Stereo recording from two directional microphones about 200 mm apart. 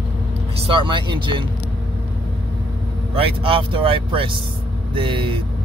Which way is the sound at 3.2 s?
25° right (ahead or behind).